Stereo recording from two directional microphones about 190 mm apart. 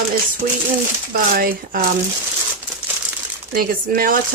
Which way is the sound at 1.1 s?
50° right (ahead or behind).